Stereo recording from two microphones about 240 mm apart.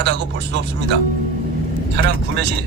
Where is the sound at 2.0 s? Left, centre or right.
Right.